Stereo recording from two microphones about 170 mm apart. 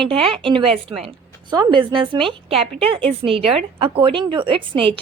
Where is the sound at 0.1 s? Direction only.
35° right (ahead or behind).